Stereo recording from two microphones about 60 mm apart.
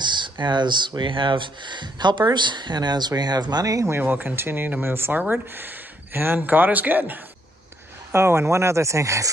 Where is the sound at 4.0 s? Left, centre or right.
Right.